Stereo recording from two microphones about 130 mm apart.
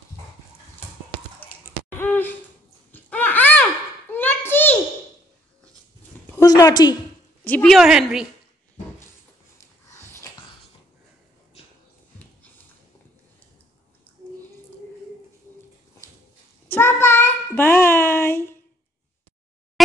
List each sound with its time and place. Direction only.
2.0 s owl: 15° left (ahead or behind)
2.9 s a sound: 15° left (ahead or behind)
6.3 s a woman's voice: 25° left (ahead or behind)
7.4 s a woman's voice: 10° left (ahead or behind)
7.7 s a woman's voice: centre (ahead or behind)
11.6 s music: 50° left (ahead or behind)
16.6 s child singing: 15° left (ahead or behind)